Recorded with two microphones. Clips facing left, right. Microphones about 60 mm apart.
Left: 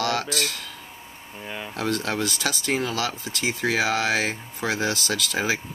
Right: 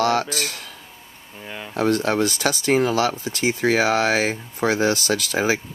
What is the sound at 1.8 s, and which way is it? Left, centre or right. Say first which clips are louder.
Speech: right 7 dB; right.